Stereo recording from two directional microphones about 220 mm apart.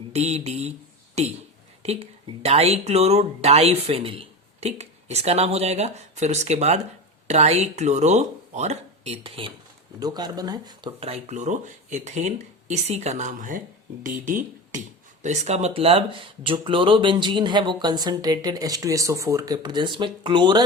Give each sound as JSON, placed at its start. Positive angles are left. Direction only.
{"t": 0.1, "sound": "speech", "side_deg": -30}